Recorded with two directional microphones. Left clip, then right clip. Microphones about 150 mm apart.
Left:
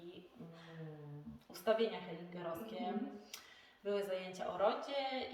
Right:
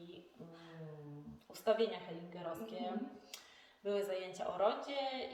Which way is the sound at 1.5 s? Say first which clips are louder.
Right 1 dB; 20° right (ahead or behind).